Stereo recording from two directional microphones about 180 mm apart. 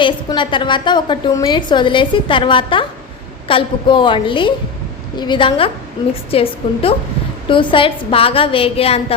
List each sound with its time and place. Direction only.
0.0 s a woman's voice: 25° left (ahead or behind)